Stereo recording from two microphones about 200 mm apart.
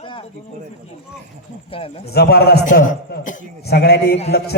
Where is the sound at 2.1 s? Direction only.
55° left (ahead or behind).